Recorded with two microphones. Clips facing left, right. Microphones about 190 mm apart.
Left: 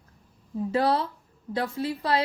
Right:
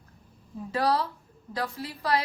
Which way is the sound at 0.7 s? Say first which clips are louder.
Left 2 dB; 25° left (ahead or behind).